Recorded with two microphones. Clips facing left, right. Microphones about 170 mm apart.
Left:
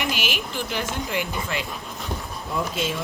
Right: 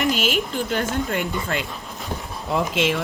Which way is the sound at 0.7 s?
50° right (ahead or behind).